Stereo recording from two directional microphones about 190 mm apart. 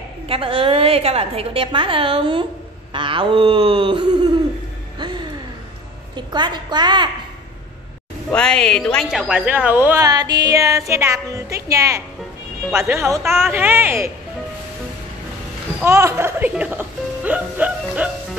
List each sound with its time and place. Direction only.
0.3 s a woman's voice: 30° right (ahead or behind)
4.9 s music: 25° right (ahead or behind)
6.1 s a woman's voice: 25° right (ahead or behind)
8.3 s a woman's voice: 5° left (ahead or behind)
10.0 s music: 20° right (ahead or behind)
15.8 s music: 15° right (ahead or behind)